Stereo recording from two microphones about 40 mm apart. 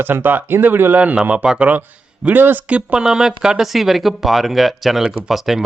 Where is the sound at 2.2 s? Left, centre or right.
Right.